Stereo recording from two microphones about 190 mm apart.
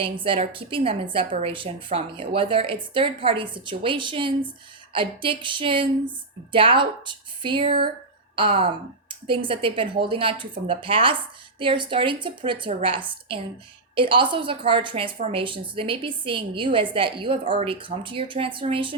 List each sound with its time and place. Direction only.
0.0 s a woman's voice: 30° right (ahead or behind)